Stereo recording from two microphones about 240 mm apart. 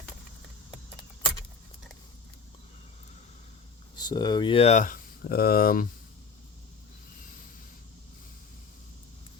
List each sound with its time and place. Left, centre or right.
3.9 s speech: centre; by 5.9 s left